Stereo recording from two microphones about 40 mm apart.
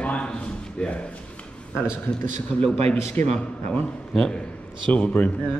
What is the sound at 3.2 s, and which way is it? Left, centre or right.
Speech, left.